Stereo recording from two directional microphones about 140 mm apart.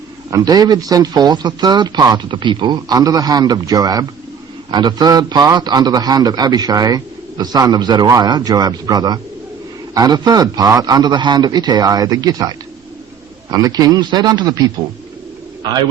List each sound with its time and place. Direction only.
0.3 s a man's voice: 25° right (ahead or behind)